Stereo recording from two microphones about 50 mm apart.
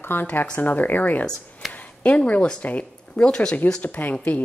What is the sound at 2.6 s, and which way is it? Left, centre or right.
Speech, left.